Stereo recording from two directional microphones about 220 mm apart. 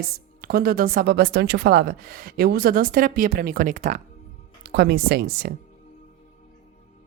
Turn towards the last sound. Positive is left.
turn(degrees=-45)  # may be behind; listen again after turning